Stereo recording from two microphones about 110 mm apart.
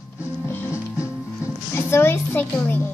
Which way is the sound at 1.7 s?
20° left (ahead or behind).